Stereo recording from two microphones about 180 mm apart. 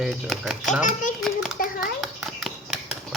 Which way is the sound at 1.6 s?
50° left (ahead or behind).